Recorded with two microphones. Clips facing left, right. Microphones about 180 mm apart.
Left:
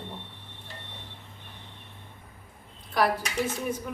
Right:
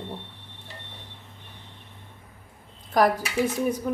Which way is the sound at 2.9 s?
45° right (ahead or behind).